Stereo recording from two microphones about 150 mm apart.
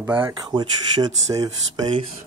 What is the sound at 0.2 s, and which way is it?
Speech, 30° right (ahead or behind).